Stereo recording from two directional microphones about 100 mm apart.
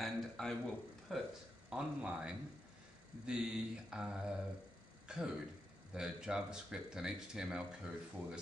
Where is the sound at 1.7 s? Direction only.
10° right (ahead or behind).